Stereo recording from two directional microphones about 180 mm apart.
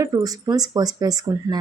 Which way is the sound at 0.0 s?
20° right (ahead or behind).